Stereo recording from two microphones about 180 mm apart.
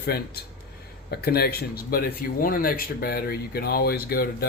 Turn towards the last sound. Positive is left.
turn(degrees=60)  # may be behind; listen again after turning